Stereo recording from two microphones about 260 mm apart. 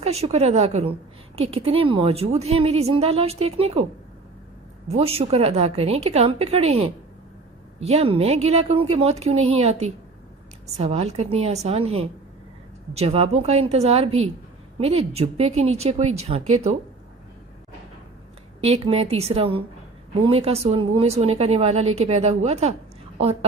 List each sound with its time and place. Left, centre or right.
0.0 s a woman's voice: right
4.9 s a woman's voice: right
18.6 s a woman's voice: right